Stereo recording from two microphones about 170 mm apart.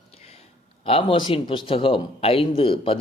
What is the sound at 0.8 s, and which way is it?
A man's voice, 35° left (ahead or behind).